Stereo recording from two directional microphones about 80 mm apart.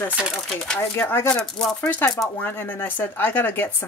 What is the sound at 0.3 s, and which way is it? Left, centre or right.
Speech, centre.